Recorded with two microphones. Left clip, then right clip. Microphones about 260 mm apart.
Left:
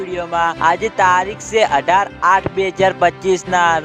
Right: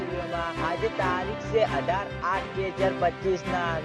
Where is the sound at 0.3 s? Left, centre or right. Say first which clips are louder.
Left 16 dB; left.